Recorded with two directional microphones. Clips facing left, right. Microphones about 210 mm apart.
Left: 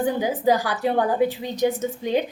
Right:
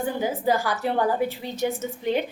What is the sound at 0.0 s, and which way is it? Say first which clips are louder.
A woman's voice: left 4 dB; 15° left (ahead or behind).